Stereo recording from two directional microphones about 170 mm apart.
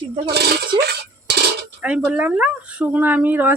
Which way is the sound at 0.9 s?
75° right (ahead or behind).